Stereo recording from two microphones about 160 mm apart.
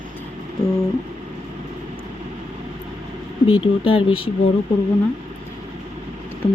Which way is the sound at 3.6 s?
35° left (ahead or behind).